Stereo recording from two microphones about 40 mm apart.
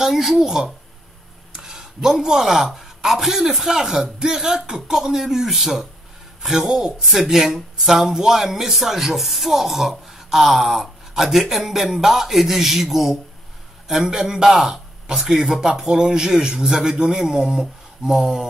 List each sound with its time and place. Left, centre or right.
0.0 s speech: centre
6.7 s speech: centre